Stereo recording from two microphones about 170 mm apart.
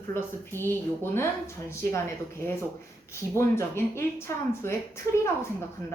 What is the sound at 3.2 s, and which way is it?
A woman's voice, 15° left (ahead or behind).